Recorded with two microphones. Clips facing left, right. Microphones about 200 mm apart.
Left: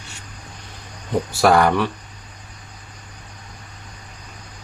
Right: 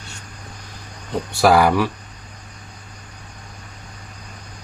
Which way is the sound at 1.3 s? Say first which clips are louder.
Right 1 dB; centre (ahead or behind).